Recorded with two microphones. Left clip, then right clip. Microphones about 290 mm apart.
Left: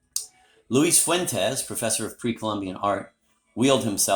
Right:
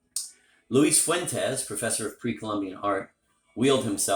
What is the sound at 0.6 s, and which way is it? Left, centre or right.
Speech, left.